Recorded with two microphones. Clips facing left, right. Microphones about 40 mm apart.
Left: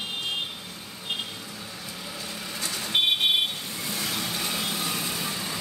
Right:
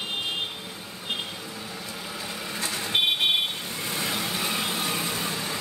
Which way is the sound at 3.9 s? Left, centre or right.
Centre.